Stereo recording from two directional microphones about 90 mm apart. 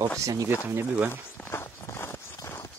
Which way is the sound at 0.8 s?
15° right (ahead or behind).